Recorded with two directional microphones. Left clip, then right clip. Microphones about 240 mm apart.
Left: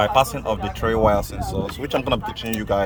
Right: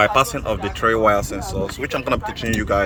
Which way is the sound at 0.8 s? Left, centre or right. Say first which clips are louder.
Right 5 dB; right.